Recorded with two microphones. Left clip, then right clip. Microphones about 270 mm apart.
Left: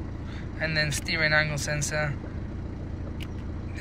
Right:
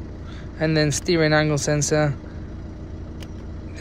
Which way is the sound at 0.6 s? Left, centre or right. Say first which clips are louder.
Right 6 dB; right.